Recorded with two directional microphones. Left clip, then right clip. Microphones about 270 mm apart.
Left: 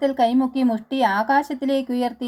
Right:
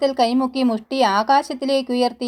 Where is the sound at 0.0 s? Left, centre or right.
Centre.